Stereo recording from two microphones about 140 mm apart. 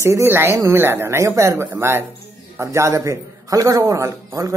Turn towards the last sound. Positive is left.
turn(degrees=-20)  # may be behind; listen again after turning